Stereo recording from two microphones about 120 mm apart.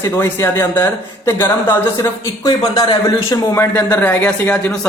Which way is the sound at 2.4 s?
35° left (ahead or behind).